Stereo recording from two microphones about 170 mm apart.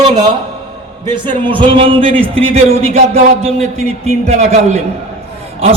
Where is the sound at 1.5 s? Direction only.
30° right (ahead or behind).